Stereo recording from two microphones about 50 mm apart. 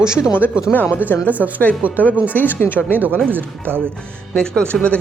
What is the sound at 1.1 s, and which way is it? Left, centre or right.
Speech, left.